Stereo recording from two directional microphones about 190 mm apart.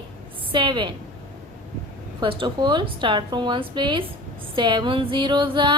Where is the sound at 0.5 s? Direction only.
25° right (ahead or behind).